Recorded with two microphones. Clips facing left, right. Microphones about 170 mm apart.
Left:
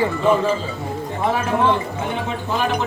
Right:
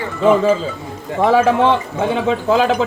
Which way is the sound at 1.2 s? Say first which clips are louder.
Right 7 dB; 90° right.